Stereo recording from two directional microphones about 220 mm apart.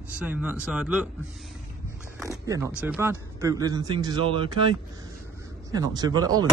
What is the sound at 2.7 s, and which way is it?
Speech, 5° right (ahead or behind).